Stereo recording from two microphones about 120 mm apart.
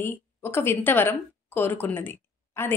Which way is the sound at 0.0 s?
20° left (ahead or behind).